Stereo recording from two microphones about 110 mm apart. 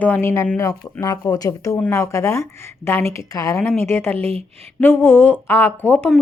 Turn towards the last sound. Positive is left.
turn(degrees=15)  # may be behind; listen again after turning